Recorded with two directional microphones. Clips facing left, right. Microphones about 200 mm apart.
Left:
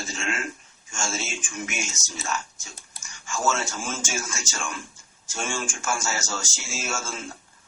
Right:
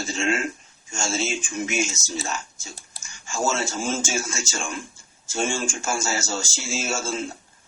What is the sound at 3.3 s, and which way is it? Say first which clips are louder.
Speech: right 2 dB; 25° right (ahead or behind).